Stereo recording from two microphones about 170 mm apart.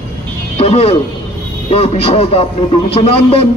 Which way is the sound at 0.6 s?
35° left (ahead or behind).